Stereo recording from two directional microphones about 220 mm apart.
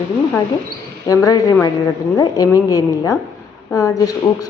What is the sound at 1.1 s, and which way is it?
A woman's voice, 15° left (ahead or behind).